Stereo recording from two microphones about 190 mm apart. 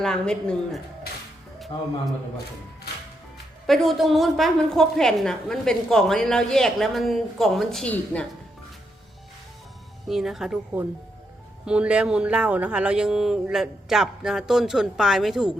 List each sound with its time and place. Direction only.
0.0 s a woman's voice: 5° left (ahead or behind)
1.7 s a man's voice: 25° left (ahead or behind)
3.7 s a woman's voice: centre (ahead or behind)
10.1 s a woman's voice: centre (ahead or behind)